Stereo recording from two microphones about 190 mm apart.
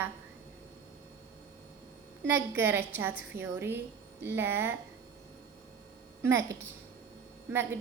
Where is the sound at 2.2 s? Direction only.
10° right (ahead or behind).